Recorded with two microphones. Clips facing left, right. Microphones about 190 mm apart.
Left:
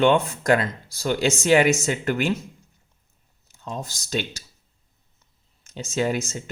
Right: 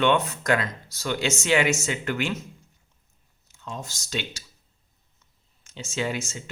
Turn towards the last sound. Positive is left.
turn(degrees=40)  # may be behind; listen again after turning